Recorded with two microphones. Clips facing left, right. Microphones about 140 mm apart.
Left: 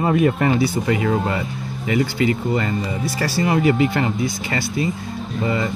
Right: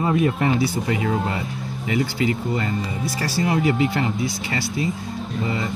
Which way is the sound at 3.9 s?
55° left (ahead or behind).